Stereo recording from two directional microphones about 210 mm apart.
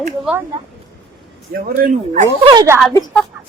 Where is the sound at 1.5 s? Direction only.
40° right (ahead or behind).